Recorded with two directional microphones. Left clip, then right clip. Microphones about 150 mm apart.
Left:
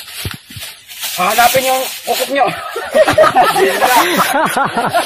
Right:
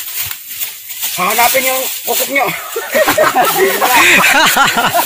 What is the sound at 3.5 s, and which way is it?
Speech, 10° left (ahead or behind).